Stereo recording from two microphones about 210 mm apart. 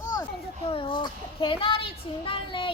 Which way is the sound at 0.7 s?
25° left (ahead or behind).